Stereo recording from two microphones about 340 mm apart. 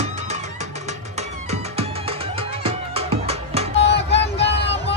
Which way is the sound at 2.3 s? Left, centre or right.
Centre.